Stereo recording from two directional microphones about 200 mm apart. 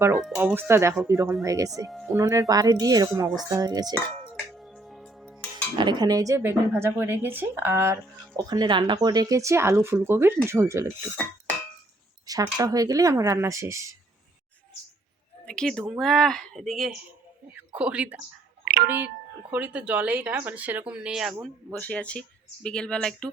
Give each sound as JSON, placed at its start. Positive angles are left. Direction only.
{"t": 0.3, "sound": "speech", "side_deg": -10}
{"t": 1.9, "sound": "speech", "side_deg": 0}
{"t": 2.1, "sound": "speech", "side_deg": -15}
{"t": 4.2, "sound": "music", "side_deg": 0}
{"t": 5.7, "sound": "speech", "side_deg": -20}
{"t": 12.3, "sound": "speech", "side_deg": -20}
{"t": 15.4, "sound": "speech", "side_deg": 5}
{"t": 18.6, "sound": "a sound", "side_deg": -50}
{"t": 19.5, "sound": "speech", "side_deg": -10}